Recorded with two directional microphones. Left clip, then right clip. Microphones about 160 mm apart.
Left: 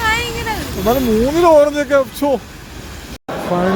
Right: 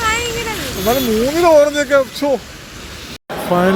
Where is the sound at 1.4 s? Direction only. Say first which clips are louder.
Even; 15° left (ahead or behind).